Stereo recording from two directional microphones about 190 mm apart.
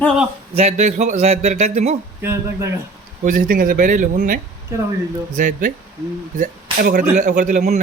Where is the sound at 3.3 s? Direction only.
45° right (ahead or behind).